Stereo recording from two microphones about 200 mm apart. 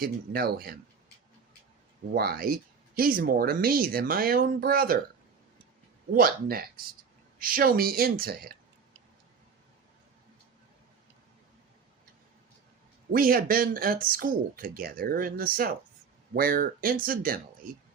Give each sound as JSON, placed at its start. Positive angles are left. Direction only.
{"t": 0.0, "sound": "speech", "side_deg": -50}
{"t": 2.1, "sound": "speech", "side_deg": -50}
{"t": 6.1, "sound": "speech", "side_deg": -45}
{"t": 13.1, "sound": "speech", "side_deg": -45}